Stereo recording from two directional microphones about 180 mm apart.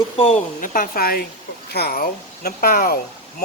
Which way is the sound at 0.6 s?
50° left (ahead or behind).